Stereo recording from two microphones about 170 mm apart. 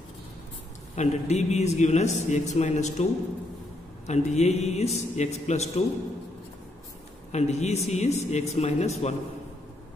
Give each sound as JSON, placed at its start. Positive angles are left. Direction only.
{"t": 0.9, "sound": "a man's voice", "side_deg": 40}
{"t": 4.1, "sound": "a man's voice", "side_deg": 40}
{"t": 7.3, "sound": "a man's voice", "side_deg": 40}